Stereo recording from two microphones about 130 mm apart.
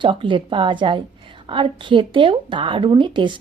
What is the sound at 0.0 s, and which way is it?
A woman's voice, 40° right (ahead or behind).